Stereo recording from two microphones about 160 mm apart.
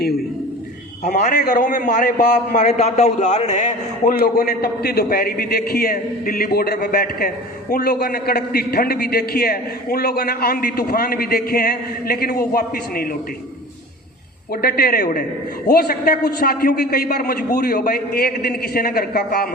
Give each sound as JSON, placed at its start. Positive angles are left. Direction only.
{"t": 1.0, "sound": "a man's voice", "side_deg": 50}
{"t": 4.4, "sound": "a man's voice", "side_deg": 80}
{"t": 14.5, "sound": "a man's voice", "side_deg": 70}